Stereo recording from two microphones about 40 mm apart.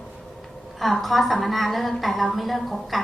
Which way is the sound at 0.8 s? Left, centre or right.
Centre.